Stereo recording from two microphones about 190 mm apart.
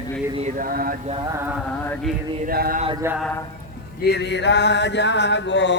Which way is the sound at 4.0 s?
60° left (ahead or behind).